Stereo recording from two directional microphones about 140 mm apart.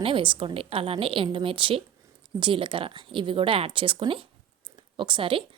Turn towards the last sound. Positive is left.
turn(degrees=-40)  # may be behind; listen again after turning